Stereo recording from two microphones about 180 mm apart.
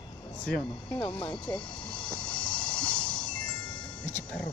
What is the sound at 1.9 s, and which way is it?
Music, 25° left (ahead or behind).